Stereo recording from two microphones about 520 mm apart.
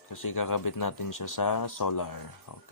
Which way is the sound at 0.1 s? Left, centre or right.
Left.